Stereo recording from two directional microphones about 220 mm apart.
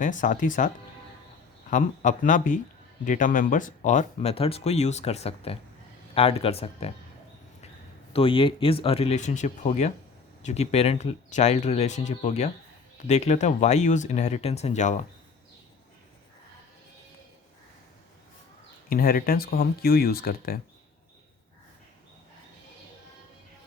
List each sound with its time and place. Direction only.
0.0 s speech: 35° left (ahead or behind)
1.7 s speech: 35° left (ahead or behind)
8.1 s speech: 25° left (ahead or behind)
18.9 s speech: 40° left (ahead or behind)